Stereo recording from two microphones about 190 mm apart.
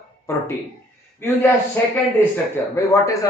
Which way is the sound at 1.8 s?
10° left (ahead or behind).